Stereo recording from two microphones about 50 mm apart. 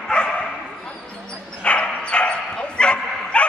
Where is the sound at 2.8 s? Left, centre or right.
Centre.